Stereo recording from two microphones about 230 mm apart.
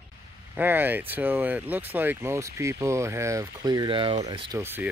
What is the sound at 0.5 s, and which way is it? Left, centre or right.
Speech, centre.